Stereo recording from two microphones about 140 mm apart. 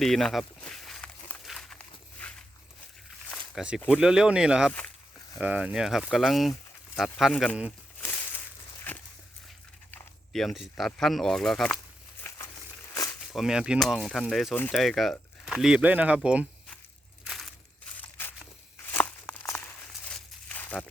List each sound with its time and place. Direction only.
0.0 s walk: centre (ahead or behind)
3.5 s speech: 5° right (ahead or behind)
9.9 s speech: centre (ahead or behind)
12.9 s a sound: 25° left (ahead or behind)
13.3 s speech: 5° right (ahead or behind)
14.5 s speech: 15° left (ahead or behind)
14.8 s speech: centre (ahead or behind)
17.2 s crushing: centre (ahead or behind)
17.9 s crushing: 15° left (ahead or behind)
18.9 s tearing: 15° left (ahead or behind)
20.1 s crumpling: 10° left (ahead or behind)